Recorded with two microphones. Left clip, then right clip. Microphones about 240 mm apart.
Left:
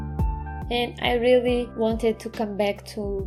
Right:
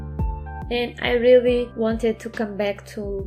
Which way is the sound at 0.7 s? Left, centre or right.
Left.